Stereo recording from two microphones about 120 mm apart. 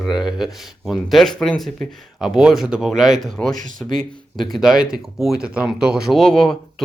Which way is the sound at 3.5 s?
90° right.